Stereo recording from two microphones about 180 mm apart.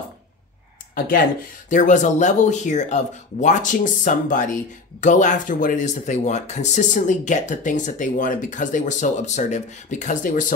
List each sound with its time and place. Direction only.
0.9 s speech: 55° left (ahead or behind)